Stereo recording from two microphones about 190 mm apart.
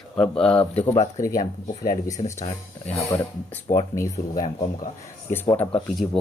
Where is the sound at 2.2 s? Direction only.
35° left (ahead or behind).